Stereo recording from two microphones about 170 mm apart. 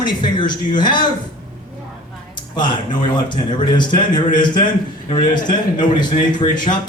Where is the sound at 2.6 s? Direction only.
25° left (ahead or behind).